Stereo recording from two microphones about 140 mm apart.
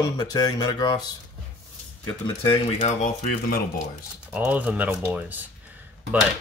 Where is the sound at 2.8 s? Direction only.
60° left (ahead or behind); by 3.6 s 80° left.